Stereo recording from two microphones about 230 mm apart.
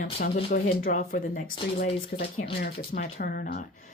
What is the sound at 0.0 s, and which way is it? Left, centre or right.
Speech, left.